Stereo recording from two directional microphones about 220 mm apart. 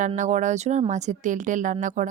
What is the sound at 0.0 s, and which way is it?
Speech, 35° right (ahead or behind).